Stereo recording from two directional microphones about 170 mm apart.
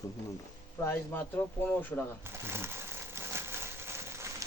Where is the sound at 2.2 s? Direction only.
15° right (ahead or behind).